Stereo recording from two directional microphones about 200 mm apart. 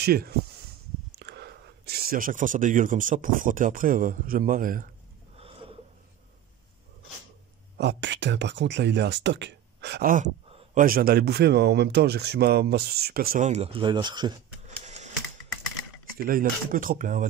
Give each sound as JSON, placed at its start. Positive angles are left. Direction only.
{"t": 0.0, "sound": "speech", "side_deg": -50}
{"t": 5.4, "sound": "a sound", "side_deg": -30}
{"t": 7.7, "sound": "speech", "side_deg": -60}
{"t": 10.8, "sound": "speech", "side_deg": -45}
{"t": 13.5, "sound": "speech", "side_deg": -30}
{"t": 16.2, "sound": "speech", "side_deg": -45}